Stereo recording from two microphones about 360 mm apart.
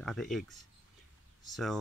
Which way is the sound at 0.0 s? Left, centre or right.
Centre.